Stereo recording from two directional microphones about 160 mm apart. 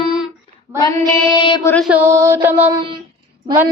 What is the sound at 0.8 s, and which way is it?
Music, 20° left (ahead or behind).